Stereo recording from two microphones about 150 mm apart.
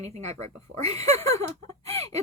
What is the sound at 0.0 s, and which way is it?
Speech, 45° right (ahead or behind).